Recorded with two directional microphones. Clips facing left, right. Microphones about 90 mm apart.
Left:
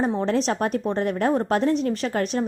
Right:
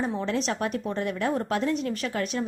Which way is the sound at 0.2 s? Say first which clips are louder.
Left 5 dB; 35° left (ahead or behind).